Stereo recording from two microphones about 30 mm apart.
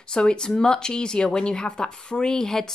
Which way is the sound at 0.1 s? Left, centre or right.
Left.